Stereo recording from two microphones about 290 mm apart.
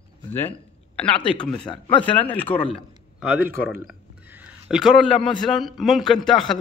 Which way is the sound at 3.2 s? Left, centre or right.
Centre.